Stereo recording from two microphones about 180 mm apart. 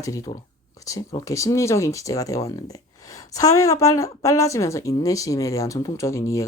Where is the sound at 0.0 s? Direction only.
20° left (ahead or behind).